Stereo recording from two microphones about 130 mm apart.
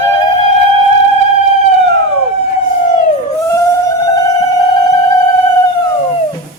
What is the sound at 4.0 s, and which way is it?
Mosquito, 25° left (ahead or behind).